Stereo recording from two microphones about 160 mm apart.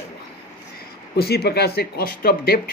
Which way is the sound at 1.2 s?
80° left.